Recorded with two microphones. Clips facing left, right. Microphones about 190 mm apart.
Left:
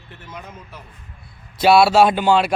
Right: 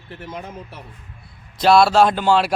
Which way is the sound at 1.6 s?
5° left (ahead or behind).